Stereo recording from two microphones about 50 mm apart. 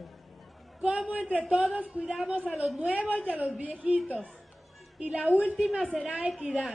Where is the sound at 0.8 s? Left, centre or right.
Right.